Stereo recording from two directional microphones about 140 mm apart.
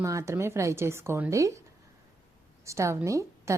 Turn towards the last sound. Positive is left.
turn(degrees=-20)  # may be behind; listen again after turning